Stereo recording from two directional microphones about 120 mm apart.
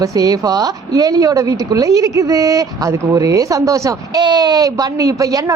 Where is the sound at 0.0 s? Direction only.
30° right (ahead or behind).